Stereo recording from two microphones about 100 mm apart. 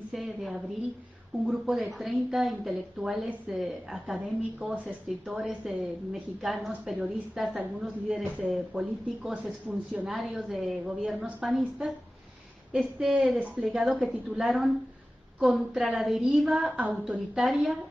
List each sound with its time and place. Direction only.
0.1 s a woman's voice: centre (ahead or behind)
10.0 s a woman's voice: centre (ahead or behind)
16.7 s a woman's voice: 15° right (ahead or behind)